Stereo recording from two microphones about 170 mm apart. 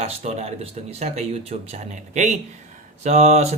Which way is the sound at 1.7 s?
45° right (ahead or behind).